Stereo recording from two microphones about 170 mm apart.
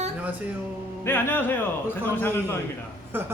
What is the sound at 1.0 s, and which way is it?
Speech, 15° left (ahead or behind).